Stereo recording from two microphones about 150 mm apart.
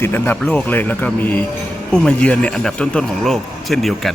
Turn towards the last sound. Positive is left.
turn(degrees=0)  # may be behind; listen again after turning